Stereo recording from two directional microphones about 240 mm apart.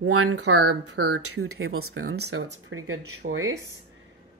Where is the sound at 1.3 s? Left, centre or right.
Right.